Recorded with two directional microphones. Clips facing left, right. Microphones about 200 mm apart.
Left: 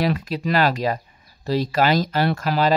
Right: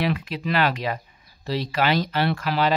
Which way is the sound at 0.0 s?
40° left (ahead or behind).